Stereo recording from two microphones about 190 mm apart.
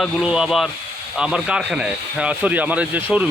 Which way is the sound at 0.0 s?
5° right (ahead or behind).